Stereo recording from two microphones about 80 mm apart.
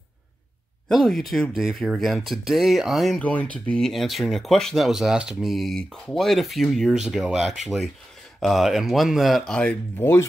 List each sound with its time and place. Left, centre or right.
0.8 s speech: centre
3.2 s speech: centre
3.8 s speech: centre
9.5 s speech: centre
9.9 s speech: left